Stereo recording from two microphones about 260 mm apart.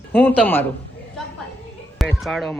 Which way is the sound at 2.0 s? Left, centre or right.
Centre.